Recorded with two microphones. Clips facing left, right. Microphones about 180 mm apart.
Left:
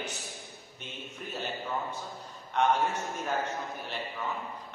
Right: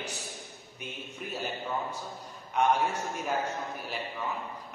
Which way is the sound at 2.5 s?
10° right (ahead or behind).